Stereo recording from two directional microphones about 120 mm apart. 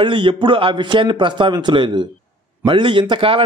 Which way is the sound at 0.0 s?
45° right (ahead or behind).